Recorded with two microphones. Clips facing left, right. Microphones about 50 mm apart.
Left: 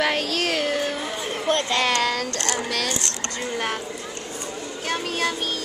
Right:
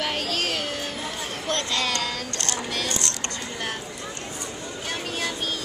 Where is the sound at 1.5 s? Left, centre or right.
Left.